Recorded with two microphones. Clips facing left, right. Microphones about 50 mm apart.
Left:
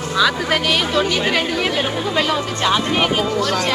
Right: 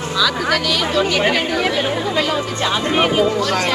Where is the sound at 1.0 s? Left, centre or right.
Right.